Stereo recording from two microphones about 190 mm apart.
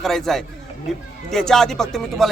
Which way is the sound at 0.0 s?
Centre (ahead or behind).